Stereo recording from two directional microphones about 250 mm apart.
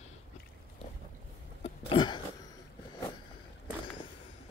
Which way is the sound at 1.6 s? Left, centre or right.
Centre.